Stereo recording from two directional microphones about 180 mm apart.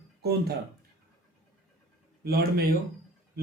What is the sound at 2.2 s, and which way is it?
Speech, 60° right (ahead or behind).